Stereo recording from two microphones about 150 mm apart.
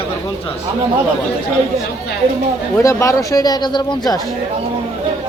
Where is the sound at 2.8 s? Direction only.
20° left (ahead or behind).